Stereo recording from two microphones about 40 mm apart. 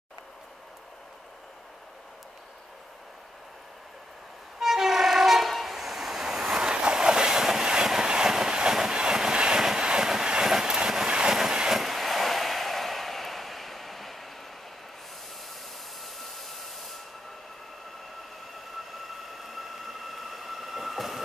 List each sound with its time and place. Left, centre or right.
4.6 s train: centre
6.6 s train: right
11.7 s a sound: centre
16.0 s hair dryer: centre
18.9 s train: centre